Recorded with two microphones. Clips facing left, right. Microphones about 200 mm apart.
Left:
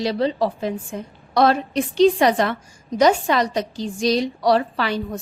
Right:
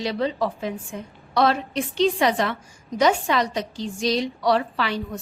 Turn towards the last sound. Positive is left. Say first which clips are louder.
# left 3 dB
turn(degrees=40)  # may be behind; listen again after turning